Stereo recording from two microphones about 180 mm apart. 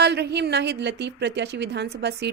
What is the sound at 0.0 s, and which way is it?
A woman's voice, 70° right (ahead or behind).